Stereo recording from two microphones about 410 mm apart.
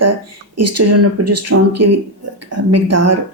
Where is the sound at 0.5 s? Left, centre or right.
Right.